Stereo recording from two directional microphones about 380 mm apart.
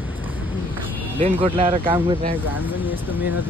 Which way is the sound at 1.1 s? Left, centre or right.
Centre.